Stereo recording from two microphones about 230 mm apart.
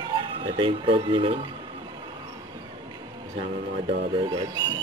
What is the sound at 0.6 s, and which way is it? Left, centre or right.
Speech, right.